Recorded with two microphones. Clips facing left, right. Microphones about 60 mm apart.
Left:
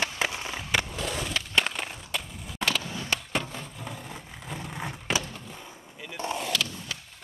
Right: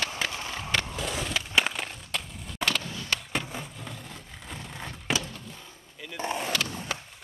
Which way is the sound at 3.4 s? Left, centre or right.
Centre.